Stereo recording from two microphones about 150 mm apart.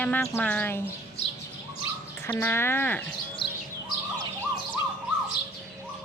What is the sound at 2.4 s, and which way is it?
Speech, 15° left (ahead or behind).